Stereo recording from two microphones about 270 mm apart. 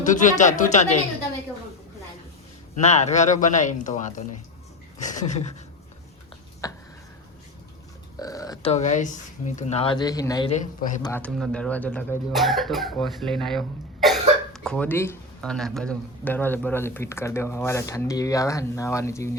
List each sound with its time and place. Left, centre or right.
0.0 s speech: left
2.8 s speech: left
6.6 s a sound: centre
8.2 s a sound: centre
8.7 s speech: left
10.5 s speech: left
11.0 s speech: centre